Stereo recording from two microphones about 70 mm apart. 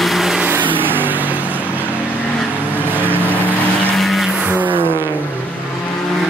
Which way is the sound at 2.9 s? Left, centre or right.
Right.